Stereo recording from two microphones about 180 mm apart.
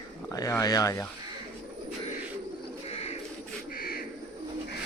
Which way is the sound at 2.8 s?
35° left (ahead or behind).